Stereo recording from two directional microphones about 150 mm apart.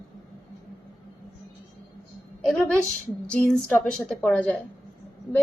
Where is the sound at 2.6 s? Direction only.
10° left (ahead or behind).